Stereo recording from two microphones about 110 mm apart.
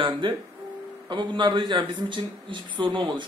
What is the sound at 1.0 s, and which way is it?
Speech, 45° right (ahead or behind).